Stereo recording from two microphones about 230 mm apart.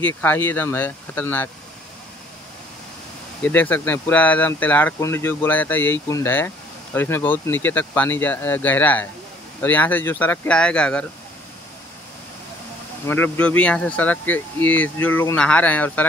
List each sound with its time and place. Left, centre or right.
0.0 s speech: centre
3.4 s speech: centre
13.0 s speech: centre